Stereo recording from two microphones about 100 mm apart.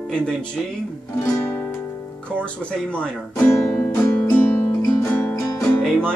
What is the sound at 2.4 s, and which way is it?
Speech, 10° left (ahead or behind).